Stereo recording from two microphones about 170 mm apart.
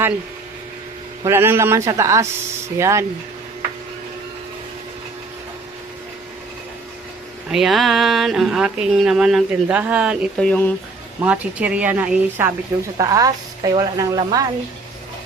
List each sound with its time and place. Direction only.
1.2 s speech: 15° right (ahead or behind)
7.5 s speech: centre (ahead or behind)
10.4 s speech: 10° left (ahead or behind)
11.2 s speech: 10° right (ahead or behind)
13.0 s a woman's voice: 20° right (ahead or behind)